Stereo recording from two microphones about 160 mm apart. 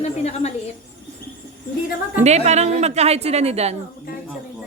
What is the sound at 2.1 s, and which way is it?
A woman's voice, 45° right (ahead or behind).